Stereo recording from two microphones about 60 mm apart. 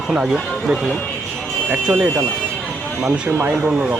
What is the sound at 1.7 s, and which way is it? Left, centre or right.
Speech, right.